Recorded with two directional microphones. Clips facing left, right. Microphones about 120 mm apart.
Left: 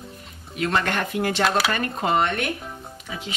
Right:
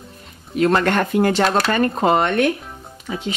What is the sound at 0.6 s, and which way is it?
Speech, 40° right (ahead or behind).